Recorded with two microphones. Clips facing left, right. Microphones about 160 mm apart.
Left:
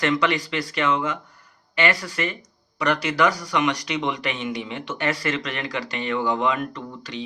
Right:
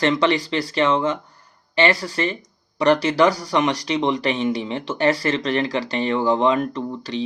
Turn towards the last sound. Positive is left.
turn(degrees=-30)  # may be behind; listen again after turning